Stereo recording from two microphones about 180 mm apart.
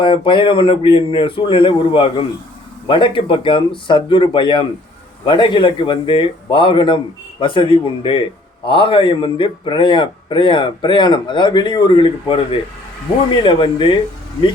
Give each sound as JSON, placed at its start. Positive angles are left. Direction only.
{"t": 0.0, "sound": "a man's voice", "side_deg": 25}